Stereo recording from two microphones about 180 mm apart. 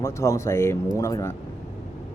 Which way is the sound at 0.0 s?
15° left (ahead or behind).